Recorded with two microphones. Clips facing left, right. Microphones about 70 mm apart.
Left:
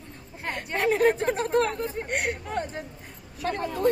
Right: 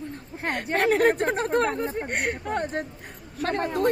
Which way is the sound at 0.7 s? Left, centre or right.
Right.